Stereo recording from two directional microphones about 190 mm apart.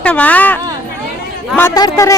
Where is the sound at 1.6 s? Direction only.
20° left (ahead or behind).